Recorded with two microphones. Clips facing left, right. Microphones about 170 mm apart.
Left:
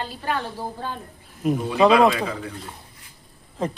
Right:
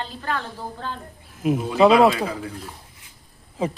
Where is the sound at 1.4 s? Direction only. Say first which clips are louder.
Right 1 dB; 5° right (ahead or behind).